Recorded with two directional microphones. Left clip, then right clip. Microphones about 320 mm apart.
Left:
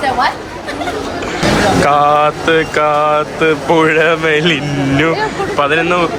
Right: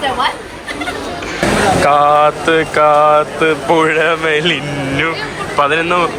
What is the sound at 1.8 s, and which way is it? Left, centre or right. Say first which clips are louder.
Vehicle: right 1 dB; centre.